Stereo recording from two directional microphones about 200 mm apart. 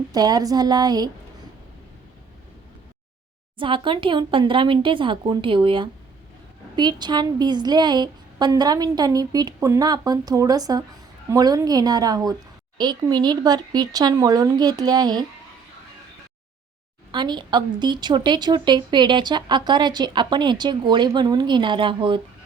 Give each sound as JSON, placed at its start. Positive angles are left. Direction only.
{"t": 0.1, "sound": "speech", "side_deg": -20}
{"t": 3.6, "sound": "speech", "side_deg": -25}
{"t": 17.1, "sound": "speech", "side_deg": -20}